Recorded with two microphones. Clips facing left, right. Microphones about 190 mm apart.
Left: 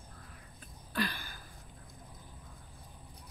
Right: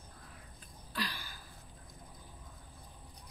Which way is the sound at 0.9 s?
50° left (ahead or behind).